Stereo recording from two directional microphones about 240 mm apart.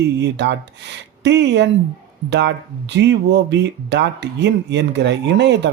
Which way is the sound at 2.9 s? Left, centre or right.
Right.